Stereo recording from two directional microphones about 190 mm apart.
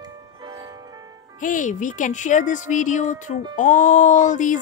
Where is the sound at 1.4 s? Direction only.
40° left (ahead or behind).